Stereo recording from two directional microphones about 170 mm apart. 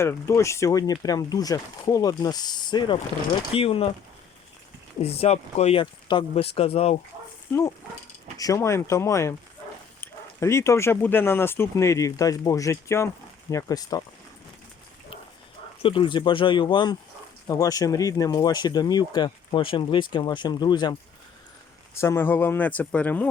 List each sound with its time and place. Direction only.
0.0 s speech: 15° left (ahead or behind); by 3.8 s 35° left (ahead or behind)
5.0 s speech: 35° left (ahead or behind)
8.4 s speech: 20° left (ahead or behind)
15.8 s speech: 30° left (ahead or behind)
21.9 s speech: 15° left (ahead or behind)